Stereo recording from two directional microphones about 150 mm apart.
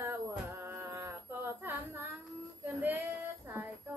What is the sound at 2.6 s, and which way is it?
Female singing, 15° right (ahead or behind).